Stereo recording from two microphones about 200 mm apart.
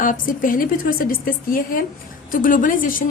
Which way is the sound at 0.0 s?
45° left (ahead or behind).